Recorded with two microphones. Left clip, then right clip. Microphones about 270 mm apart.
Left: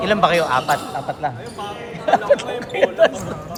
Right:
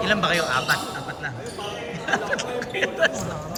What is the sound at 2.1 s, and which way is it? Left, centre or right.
Speech, centre.